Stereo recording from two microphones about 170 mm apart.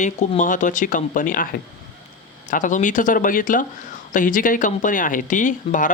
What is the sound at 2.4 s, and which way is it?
Speech, 50° left (ahead or behind).